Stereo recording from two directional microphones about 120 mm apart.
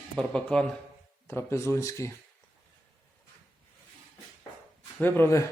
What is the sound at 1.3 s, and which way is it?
Speech, 20° left (ahead or behind).